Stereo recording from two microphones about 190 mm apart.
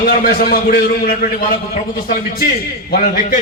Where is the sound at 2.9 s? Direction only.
50° left (ahead or behind).